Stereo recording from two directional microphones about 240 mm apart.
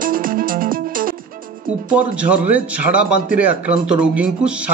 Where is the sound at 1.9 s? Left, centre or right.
Centre.